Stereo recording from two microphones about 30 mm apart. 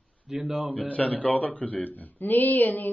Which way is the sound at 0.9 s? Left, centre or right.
Left.